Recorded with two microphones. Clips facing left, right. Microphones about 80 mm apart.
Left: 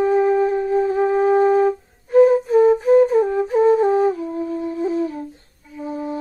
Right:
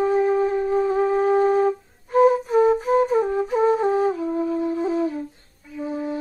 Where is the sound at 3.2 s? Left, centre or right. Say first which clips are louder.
Left 3 dB; left.